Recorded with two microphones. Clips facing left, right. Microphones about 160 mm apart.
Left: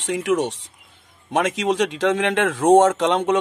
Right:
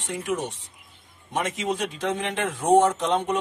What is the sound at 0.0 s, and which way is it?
Speech, 90° left.